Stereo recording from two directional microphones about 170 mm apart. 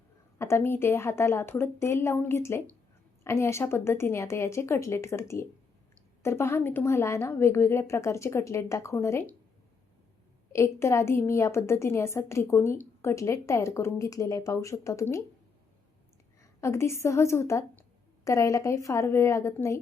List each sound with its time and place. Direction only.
0.3 s a woman's voice: 15° left (ahead or behind)
10.5 s a woman's voice: 15° left (ahead or behind)
16.6 s a woman's voice: 15° left (ahead or behind)